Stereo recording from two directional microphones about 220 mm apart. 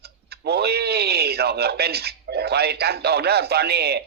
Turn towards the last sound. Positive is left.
turn(degrees=-45)  # may be behind; listen again after turning